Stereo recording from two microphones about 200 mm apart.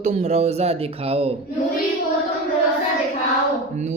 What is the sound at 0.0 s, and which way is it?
Speech, 35° right (ahead or behind).